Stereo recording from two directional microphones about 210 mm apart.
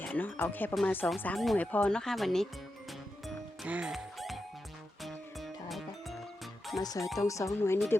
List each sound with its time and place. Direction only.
0.0 s speech: 5° left (ahead or behind)
3.2 s music: 5° right (ahead or behind)
6.8 s speech: 15° left (ahead or behind)